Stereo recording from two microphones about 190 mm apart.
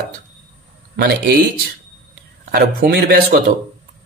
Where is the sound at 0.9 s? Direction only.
60° right (ahead or behind).